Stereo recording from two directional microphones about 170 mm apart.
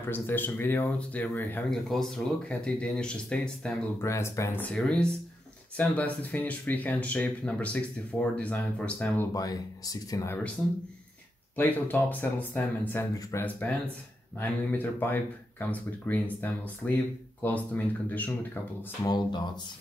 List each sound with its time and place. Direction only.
0.0 s speech: 10° left (ahead or behind)
11.5 s speech: 10° left (ahead or behind)
19.0 s speech: 25° left (ahead or behind)